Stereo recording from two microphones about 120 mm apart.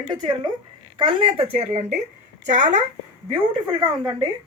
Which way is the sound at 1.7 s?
75° right (ahead or behind).